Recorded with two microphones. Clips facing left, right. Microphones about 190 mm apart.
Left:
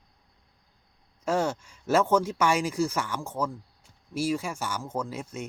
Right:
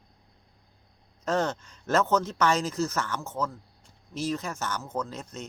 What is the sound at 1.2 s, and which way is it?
Speech, 10° left (ahead or behind).